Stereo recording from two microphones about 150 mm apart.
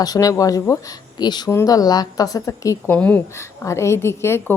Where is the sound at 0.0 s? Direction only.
25° left (ahead or behind).